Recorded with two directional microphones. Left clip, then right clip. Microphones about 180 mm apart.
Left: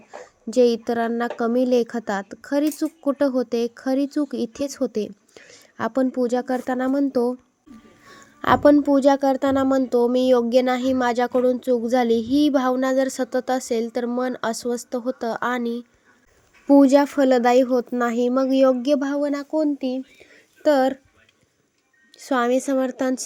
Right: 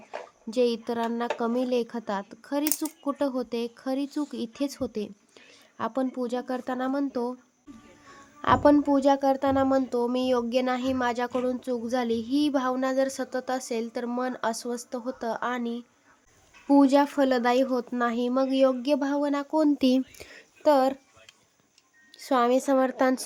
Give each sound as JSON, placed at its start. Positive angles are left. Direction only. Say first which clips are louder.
{"t": 0.5, "sound": "speech", "louder": "left 7 dB", "side_deg": 20}
{"t": 8.1, "sound": "a sound", "louder": "left 4 dB", "side_deg": 20}
{"t": 8.7, "sound": "speech", "louder": "left 5 dB", "side_deg": 15}
{"t": 19.8, "sound": "speech", "louder": "right 3 dB", "side_deg": -35}
{"t": 20.6, "sound": "speech", "louder": "left 3 dB", "side_deg": 15}
{"t": 22.2, "sound": "speech", "louder": "left 2 dB", "side_deg": 15}